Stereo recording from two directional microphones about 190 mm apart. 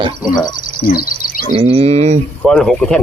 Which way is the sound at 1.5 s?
30° right (ahead or behind).